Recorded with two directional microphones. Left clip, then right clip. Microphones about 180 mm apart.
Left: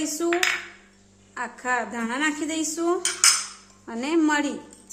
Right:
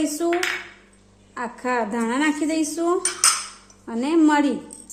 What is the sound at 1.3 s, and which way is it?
A woman's voice, 15° right (ahead or behind).